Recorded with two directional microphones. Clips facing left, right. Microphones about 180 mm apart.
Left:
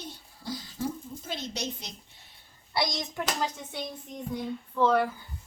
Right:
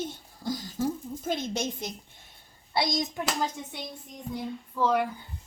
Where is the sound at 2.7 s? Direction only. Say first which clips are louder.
Right 3 dB; 25° right (ahead or behind).